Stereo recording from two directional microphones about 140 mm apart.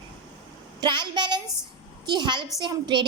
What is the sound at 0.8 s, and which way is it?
A woman's voice, 30° right (ahead or behind).